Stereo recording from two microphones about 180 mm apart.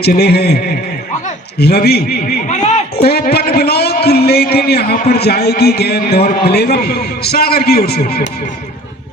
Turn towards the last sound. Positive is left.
turn(degrees=60)  # may be behind; listen again after turning